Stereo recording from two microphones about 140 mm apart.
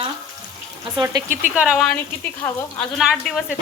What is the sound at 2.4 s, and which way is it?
Speech, 15° left (ahead or behind).